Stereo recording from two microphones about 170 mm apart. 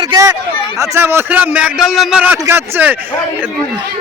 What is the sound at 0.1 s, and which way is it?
A man's voice, 20° right (ahead or behind).